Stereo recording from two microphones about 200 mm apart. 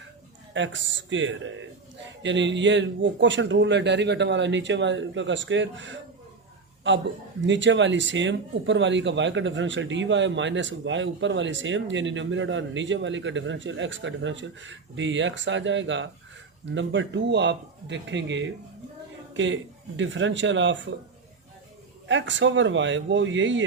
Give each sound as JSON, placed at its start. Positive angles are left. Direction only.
{"t": 0.5, "sound": "a man's voice", "side_deg": -70}
{"t": 22.0, "sound": "speech", "side_deg": -65}